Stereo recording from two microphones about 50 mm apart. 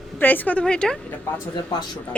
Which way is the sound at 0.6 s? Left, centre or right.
Centre.